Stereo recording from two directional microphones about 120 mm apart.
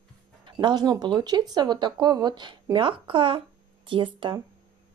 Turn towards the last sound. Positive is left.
turn(degrees=-45)  # may be behind; listen again after turning